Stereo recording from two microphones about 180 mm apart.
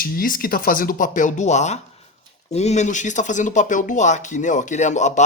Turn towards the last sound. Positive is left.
turn(degrees=40)  # may be behind; listen again after turning